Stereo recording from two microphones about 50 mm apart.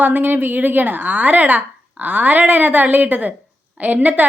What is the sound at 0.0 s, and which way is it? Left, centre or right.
A woman's voice, right.